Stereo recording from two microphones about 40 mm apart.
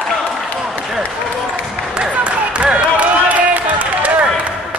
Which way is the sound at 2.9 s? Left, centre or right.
Right.